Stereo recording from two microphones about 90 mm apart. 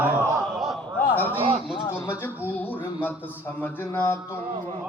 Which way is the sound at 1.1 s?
20° left (ahead or behind).